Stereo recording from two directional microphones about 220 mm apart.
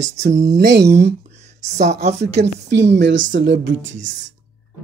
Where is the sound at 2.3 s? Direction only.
55° right (ahead or behind).